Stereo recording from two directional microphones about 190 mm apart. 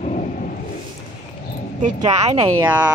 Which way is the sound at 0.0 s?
40° left (ahead or behind).